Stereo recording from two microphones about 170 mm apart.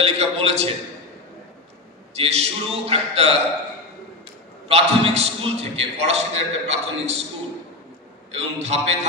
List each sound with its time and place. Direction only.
0.0 s a man's voice: 35° right (ahead or behind)
2.1 s a man's voice: 40° right (ahead or behind)
4.6 s a man's voice: 35° right (ahead or behind)
8.3 s a man's voice: 40° right (ahead or behind)